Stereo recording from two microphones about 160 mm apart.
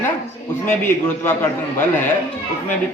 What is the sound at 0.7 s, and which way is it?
A man's voice, 15° left (ahead or behind).